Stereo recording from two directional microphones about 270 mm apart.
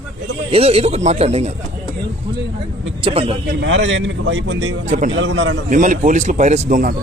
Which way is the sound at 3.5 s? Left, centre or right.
Right.